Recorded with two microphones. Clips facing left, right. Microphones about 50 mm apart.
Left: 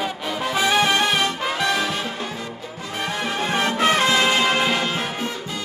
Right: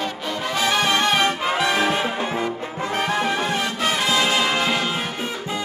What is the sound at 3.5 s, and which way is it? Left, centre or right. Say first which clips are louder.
Music: left 3 dB; left.